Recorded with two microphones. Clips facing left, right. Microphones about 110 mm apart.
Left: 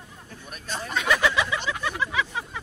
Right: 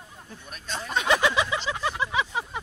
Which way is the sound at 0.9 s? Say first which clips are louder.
Right 1 dB; 25° right (ahead or behind).